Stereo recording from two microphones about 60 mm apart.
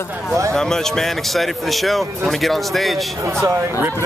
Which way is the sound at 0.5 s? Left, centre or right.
Centre.